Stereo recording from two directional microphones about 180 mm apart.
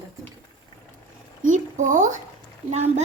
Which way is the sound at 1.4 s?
45° right (ahead or behind).